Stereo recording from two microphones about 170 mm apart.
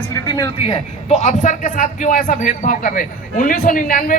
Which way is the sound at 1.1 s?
45° left (ahead or behind).